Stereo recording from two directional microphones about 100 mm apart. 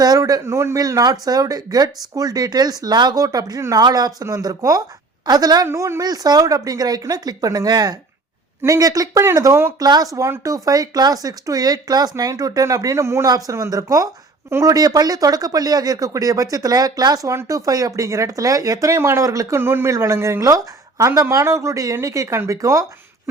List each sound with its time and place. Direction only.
0.0 s speech: 40° right (ahead or behind)
0.4 s a woman's voice: 30° right (ahead or behind)
5.6 s speech: 30° right (ahead or behind)
9.8 s speech: 40° right (ahead or behind)